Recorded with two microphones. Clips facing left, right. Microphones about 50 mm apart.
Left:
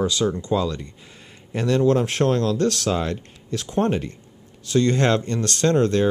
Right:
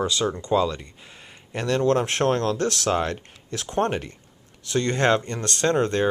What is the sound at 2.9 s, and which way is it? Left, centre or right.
Speech, right.